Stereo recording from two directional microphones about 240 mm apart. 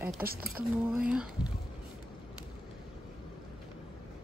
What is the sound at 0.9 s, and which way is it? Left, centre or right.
Speech, centre.